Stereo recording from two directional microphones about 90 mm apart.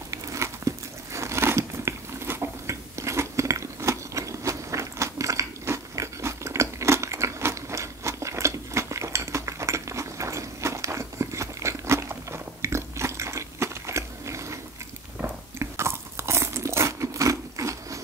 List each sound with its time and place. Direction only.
0.1 s biting: 35° right (ahead or behind)
15.1 s crunch: 25° right (ahead or behind)